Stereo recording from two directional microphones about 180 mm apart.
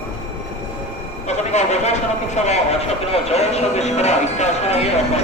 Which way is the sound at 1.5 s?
40° left (ahead or behind).